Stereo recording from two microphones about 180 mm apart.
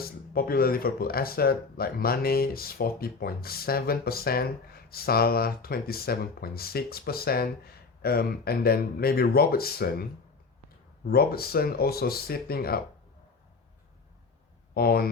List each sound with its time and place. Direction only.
0.0 s speech: 55° left (ahead or behind)
14.7 s speech: 55° left (ahead or behind)